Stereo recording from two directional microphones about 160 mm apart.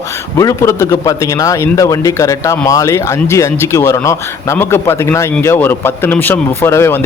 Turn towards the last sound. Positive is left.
turn(degrees=15)  # may be behind; listen again after turning